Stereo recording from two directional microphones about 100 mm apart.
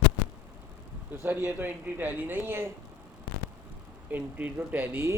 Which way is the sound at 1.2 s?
20° right (ahead or behind).